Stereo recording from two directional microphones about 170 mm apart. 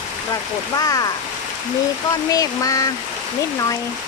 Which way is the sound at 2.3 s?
20° left (ahead or behind).